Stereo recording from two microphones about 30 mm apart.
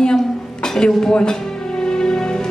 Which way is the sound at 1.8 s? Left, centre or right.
Left.